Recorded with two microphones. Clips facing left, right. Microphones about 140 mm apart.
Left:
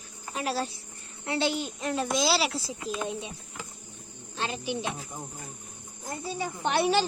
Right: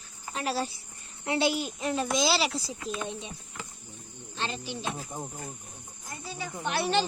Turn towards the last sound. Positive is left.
turn(degrees=20)  # may be behind; listen again after turning